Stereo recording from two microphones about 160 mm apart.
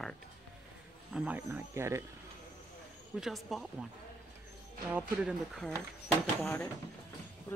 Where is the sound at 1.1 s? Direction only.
10° right (ahead or behind).